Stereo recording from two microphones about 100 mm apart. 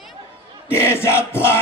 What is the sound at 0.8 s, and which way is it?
Speech, 25° left (ahead or behind).